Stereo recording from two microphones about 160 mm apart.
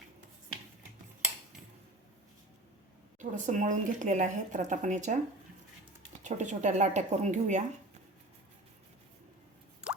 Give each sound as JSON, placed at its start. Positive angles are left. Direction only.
{"t": 3.2, "sound": "speech", "side_deg": -50}
{"t": 6.2, "sound": "speech", "side_deg": -50}
{"t": 9.8, "sound": "rodents", "side_deg": -5}